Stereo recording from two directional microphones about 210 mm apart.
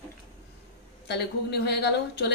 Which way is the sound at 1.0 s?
55° left (ahead or behind).